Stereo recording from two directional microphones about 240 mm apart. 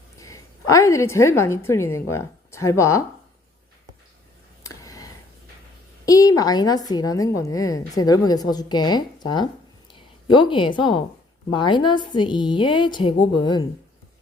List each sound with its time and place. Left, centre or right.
0.2 s a woman's voice: centre
4.6 s a sound: centre
6.1 s a woman's voice: centre